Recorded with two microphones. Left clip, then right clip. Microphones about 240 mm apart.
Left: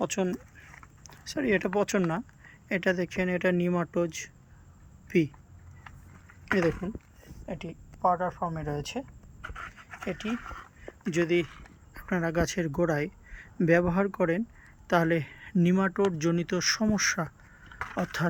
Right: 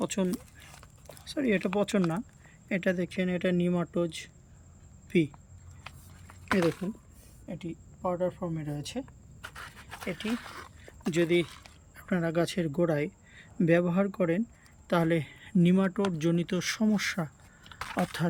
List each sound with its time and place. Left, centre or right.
0.0 s speech: centre
6.5 s speech: centre
7.4 s speech: left
8.8 s speech: centre
10.1 s speech: centre